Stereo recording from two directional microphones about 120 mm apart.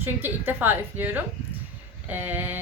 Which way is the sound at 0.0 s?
15° right (ahead or behind).